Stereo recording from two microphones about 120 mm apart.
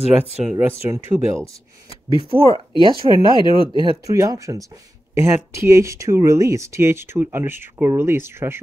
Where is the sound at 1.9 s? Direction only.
45° left (ahead or behind).